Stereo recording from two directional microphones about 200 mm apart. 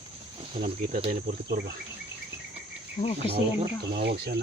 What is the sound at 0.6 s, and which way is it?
Speech, 35° right (ahead or behind).